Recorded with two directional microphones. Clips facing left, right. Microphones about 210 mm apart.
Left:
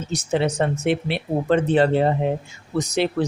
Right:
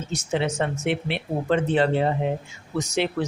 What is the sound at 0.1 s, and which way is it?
Speech, 35° left (ahead or behind).